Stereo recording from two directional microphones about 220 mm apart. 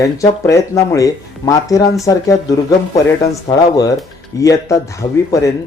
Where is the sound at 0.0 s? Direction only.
15° left (ahead or behind).